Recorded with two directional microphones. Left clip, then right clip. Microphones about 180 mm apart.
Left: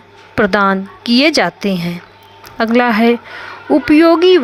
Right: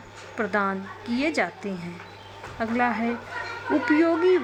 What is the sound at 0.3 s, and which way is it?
Speech, 55° left (ahead or behind).